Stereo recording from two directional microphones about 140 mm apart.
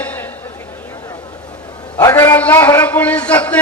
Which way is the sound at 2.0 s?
20° left (ahead or behind).